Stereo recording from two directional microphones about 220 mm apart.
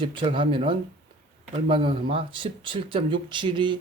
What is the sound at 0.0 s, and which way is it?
Speech, 20° right (ahead or behind).